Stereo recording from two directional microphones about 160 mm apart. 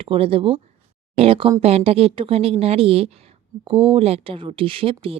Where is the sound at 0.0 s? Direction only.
35° right (ahead or behind).